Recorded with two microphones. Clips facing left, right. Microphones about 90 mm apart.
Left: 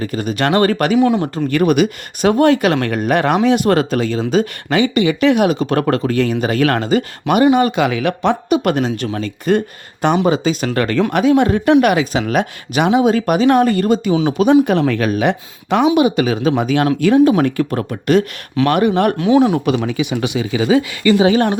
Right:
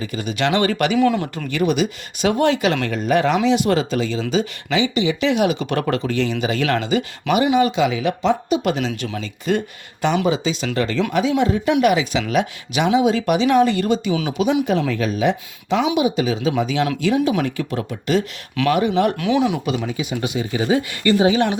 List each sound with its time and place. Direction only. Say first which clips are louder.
0.0 s speech: left 4 dB; 45° left (ahead or behind)
0.9 s speech: left 4 dB; 25° left (ahead or behind)
1.5 s speech: left 5 dB; 50° left (ahead or behind)
14.6 s speech: left 5 dB; 60° left (ahead or behind)
19.1 s speech: left 6 dB; 30° left (ahead or behind)
19.6 s speech: left 6 dB; 65° left (ahead or behind); by 20.7 s 90° left
21.3 s speech: left 4 dB; 45° left (ahead or behind)